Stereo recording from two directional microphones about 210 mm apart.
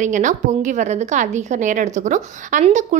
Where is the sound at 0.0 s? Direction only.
35° right (ahead or behind).